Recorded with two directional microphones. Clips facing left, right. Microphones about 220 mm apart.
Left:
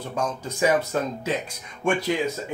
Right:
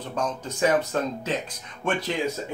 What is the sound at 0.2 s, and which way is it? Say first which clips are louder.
Speech: even; 10° left (ahead or behind).